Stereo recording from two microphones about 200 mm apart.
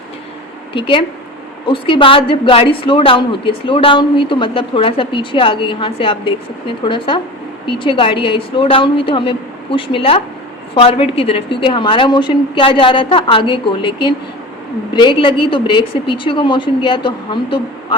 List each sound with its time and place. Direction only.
0.7 s speech: 25° left (ahead or behind)